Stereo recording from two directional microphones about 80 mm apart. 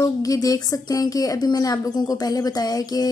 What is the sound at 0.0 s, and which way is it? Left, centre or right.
Speech, left.